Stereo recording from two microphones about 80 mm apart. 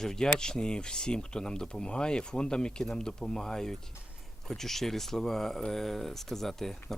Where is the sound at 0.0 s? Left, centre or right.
Centre.